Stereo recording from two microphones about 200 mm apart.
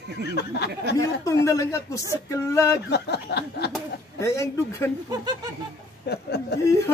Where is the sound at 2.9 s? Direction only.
55° left (ahead or behind).